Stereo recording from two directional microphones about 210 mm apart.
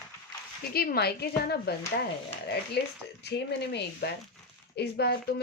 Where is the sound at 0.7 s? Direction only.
50° left (ahead or behind).